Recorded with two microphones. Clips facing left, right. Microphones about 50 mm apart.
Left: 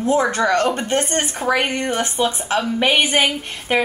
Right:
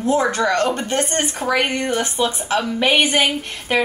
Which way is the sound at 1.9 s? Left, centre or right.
Left.